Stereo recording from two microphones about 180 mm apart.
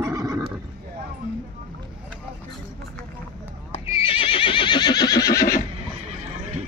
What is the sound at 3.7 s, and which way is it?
Neigh, 30° left (ahead or behind).